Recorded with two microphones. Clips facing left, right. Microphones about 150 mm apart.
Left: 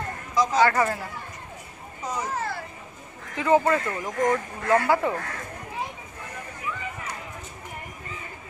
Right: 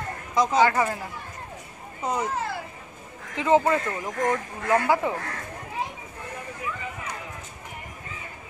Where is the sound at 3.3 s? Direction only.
20° right (ahead or behind).